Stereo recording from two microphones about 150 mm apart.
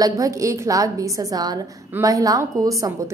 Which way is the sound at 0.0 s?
20° right (ahead or behind).